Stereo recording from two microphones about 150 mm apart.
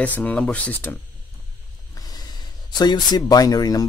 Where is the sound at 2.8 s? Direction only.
25° left (ahead or behind).